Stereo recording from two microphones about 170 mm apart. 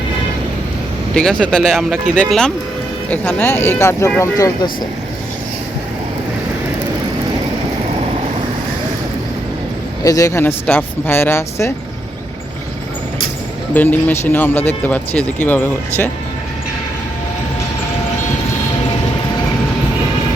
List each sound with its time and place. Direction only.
1.1 s speech: 5° left (ahead or behind)
10.0 s speech: 20° left (ahead or behind)
13.7 s speech: 10° left (ahead or behind)